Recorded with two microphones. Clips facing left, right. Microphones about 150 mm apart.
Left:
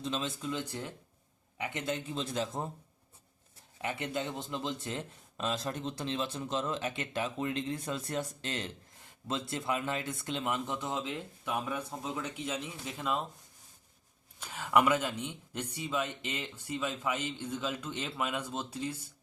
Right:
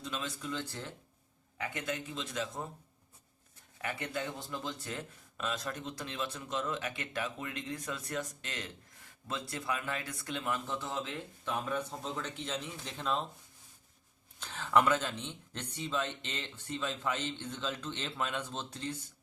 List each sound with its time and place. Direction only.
0.0 s a man's voice: 25° left (ahead or behind)
2.0 s a man's voice: 35° left (ahead or behind); by 13.2 s 5° left (ahead or behind)
14.3 s speech: 10° left (ahead or behind)